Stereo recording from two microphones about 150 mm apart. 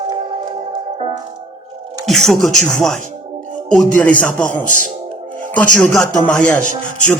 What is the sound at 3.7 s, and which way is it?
Speech, 5° left (ahead or behind).